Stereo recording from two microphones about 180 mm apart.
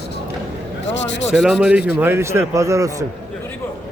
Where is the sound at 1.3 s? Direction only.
Centre (ahead or behind); by 2.9 s 15° right (ahead or behind).